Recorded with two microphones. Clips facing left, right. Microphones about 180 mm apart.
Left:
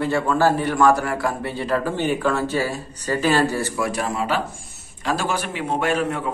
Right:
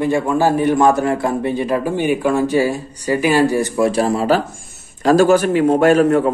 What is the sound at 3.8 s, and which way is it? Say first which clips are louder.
Speech: right 10 dB; 30° right (ahead or behind).